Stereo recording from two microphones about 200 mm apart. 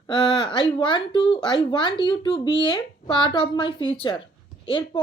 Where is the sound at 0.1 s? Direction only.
25° left (ahead or behind).